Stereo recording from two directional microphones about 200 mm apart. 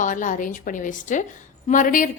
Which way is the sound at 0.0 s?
40° left (ahead or behind).